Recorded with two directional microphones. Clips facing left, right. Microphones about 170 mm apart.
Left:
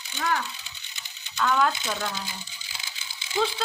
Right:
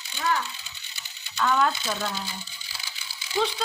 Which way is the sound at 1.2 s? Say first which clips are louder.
Even; 5° right (ahead or behind).